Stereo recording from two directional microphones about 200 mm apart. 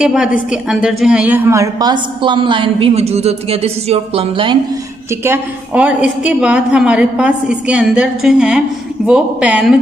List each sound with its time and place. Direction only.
0.0 s a woman's voice: 5° right (ahead or behind); by 4.6 s 25° right (ahead or behind)
5.2 s a woman's voice: 10° right (ahead or behind)